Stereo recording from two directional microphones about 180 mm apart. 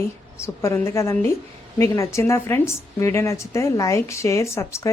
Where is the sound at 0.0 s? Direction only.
15° left (ahead or behind).